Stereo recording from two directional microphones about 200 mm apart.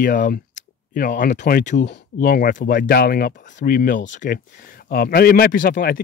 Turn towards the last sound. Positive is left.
turn(degrees=45)  # may be behind; listen again after turning